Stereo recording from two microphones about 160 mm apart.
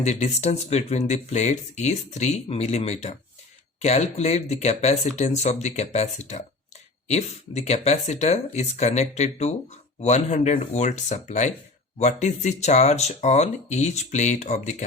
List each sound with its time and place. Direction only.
0.0 s speech: 45° left (ahead or behind)